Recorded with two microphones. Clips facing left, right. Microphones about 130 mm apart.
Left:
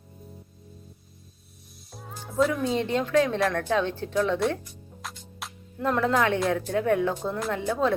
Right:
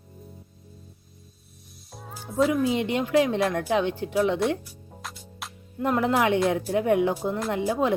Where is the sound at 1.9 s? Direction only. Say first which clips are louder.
Even; centre (ahead or behind).